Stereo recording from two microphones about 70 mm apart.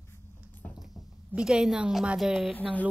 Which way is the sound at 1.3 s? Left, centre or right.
Centre.